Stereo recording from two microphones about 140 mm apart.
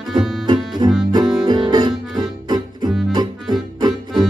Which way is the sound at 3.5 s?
30° right (ahead or behind).